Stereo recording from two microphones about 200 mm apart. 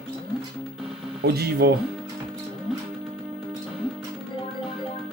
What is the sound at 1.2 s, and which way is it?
Speech, 50° right (ahead or behind).